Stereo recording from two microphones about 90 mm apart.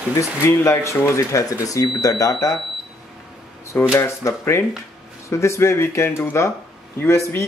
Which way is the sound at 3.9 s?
30° left (ahead or behind).